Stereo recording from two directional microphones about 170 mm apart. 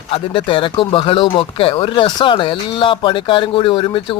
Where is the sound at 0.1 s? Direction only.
30° left (ahead or behind).